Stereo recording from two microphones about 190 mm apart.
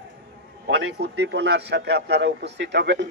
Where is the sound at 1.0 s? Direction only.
65° right (ahead or behind).